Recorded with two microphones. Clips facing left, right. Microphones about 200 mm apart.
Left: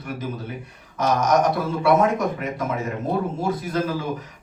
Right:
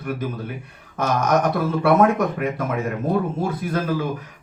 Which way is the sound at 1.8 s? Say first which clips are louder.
Right 2 dB; 55° right (ahead or behind).